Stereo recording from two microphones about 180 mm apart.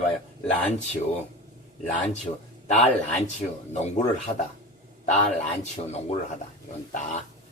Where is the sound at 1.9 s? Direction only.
40° left (ahead or behind).